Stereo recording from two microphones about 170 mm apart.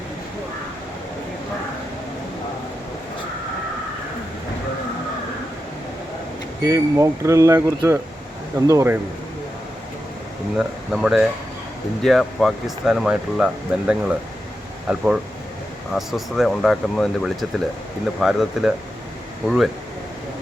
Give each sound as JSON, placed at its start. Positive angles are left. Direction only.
{"t": 6.6, "sound": "speech", "side_deg": -20}
{"t": 10.6, "sound": "speech", "side_deg": -5}